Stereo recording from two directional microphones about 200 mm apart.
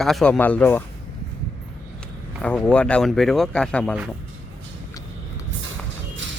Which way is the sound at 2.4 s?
5° left (ahead or behind).